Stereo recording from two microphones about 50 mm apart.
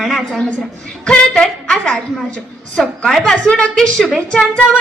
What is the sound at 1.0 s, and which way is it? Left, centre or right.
A woman's voice, left.